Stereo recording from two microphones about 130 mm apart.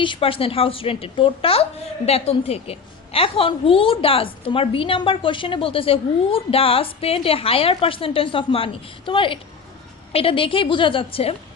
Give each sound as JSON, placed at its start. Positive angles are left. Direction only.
{"t": 0.0, "sound": "a woman's voice", "side_deg": 40}